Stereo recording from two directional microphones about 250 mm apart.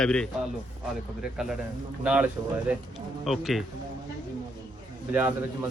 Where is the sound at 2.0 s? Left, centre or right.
Centre.